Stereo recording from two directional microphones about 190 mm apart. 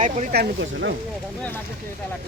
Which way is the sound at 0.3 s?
70° right (ahead or behind).